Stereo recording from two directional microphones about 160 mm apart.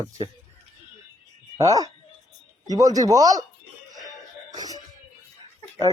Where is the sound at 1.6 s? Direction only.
20° right (ahead or behind).